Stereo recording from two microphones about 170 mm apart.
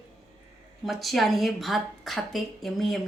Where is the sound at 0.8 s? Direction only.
Centre (ahead or behind).